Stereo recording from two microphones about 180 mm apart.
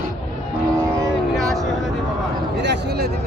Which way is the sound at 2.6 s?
70° right (ahead or behind).